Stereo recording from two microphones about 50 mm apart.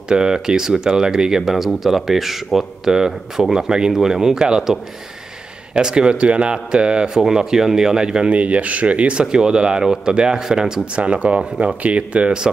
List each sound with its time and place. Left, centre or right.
0.1 s speech: centre
5.8 s speech: centre
8.3 s speech: right
11.0 s speech: right